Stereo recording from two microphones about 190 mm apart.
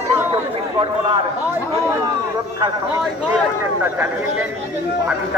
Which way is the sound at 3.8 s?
10° right (ahead or behind).